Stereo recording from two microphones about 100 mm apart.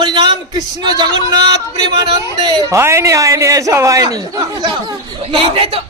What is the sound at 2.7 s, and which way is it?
A man's voice, 25° right (ahead or behind).